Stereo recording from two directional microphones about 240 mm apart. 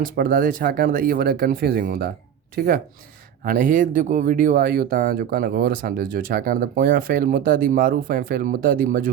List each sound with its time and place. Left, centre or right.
0.2 s speech: right